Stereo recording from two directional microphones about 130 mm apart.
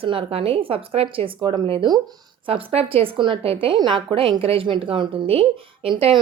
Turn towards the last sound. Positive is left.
turn(degrees=-45)  # may be behind; listen again after turning